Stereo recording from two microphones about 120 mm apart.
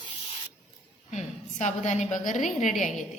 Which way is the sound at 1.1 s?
75° left (ahead or behind).